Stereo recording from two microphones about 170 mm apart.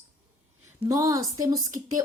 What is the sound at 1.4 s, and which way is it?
Speech, 20° right (ahead or behind).